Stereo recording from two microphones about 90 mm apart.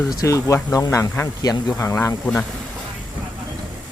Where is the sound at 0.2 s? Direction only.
35° left (ahead or behind).